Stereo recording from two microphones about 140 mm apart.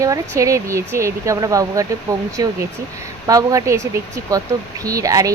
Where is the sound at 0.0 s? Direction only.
25° right (ahead or behind).